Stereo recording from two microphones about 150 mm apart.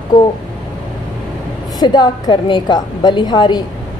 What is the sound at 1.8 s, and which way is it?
A woman's voice, 30° left (ahead or behind).